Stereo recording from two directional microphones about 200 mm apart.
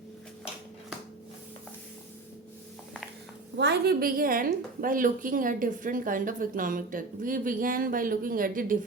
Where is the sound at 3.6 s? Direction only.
55° right (ahead or behind).